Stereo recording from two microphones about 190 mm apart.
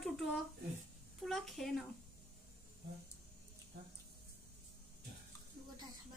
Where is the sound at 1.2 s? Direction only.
Centre (ahead or behind).